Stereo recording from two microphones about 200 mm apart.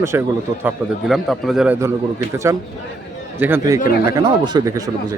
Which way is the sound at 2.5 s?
15° right (ahead or behind).